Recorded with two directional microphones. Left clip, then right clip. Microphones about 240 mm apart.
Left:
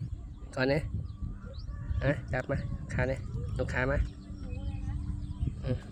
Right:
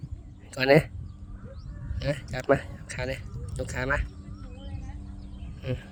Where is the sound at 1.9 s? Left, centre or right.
Right.